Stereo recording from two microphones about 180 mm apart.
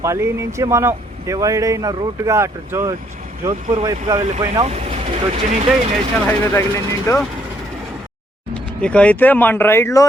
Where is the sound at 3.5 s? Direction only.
35° right (ahead or behind).